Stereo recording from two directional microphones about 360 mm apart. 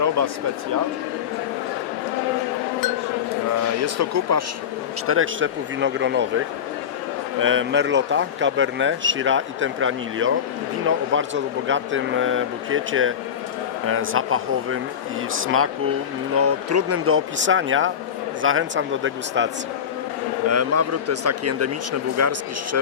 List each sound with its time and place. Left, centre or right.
3.8 s speech: right
5.0 s a man's voice: right
20.5 s a man's voice: right